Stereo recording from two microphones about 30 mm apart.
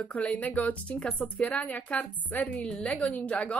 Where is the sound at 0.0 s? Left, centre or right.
Left.